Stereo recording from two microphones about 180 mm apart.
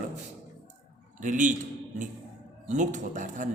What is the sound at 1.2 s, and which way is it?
Speech, 45° right (ahead or behind).